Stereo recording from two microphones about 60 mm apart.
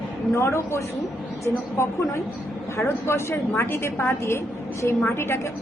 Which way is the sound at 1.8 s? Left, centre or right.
Left.